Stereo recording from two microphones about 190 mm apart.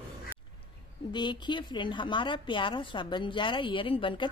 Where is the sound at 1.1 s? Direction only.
25° left (ahead or behind).